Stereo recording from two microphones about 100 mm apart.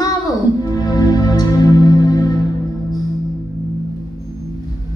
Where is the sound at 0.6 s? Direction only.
40° left (ahead or behind).